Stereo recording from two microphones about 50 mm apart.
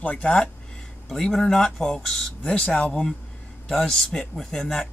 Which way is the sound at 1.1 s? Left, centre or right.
Centre.